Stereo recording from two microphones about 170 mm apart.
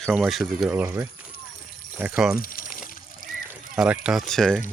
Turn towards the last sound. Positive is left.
turn(degrees=5)  # may be behind; listen again after turning